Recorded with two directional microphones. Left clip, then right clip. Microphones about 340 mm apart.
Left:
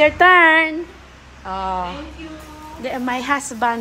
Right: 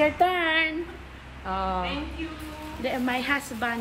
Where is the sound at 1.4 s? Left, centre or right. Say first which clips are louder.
Left 5 dB; centre.